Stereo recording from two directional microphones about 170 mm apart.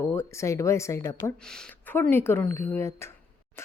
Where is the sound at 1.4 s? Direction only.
5° left (ahead or behind).